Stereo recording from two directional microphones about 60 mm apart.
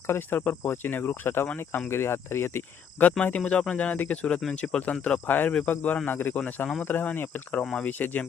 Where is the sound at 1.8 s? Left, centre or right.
Left.